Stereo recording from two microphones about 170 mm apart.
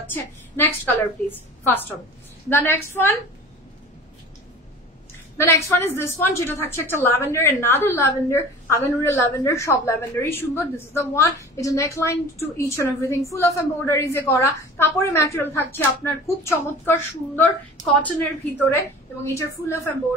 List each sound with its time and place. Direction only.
0.1 s a woman's voice: 10° left (ahead or behind)
5.4 s a woman's voice: 15° left (ahead or behind)
19.2 s a woman's voice: 15° left (ahead or behind)